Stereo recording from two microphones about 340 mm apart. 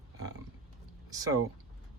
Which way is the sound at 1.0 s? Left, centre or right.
Centre.